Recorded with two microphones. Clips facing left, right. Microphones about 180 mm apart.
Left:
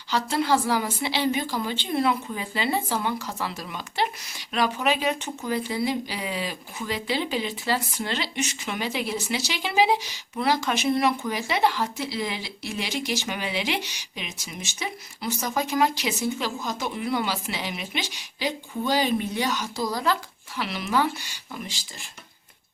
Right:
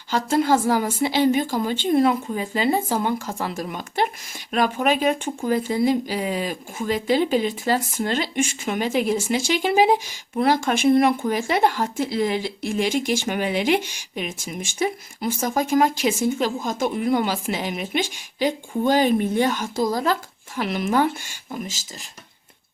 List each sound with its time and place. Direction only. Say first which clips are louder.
0.1 s speech: right 4 dB; 45° right (ahead or behind)